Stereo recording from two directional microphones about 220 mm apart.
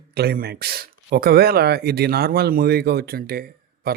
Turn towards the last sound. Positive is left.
turn(degrees=-45)  # may be behind; listen again after turning